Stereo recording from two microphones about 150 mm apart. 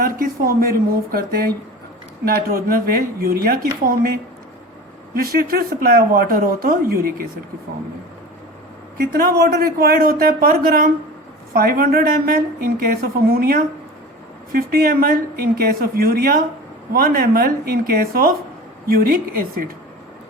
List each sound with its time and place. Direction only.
0.0 s speech: 75° right (ahead or behind)
5.1 s speech: 85° right
9.0 s speech: 90° right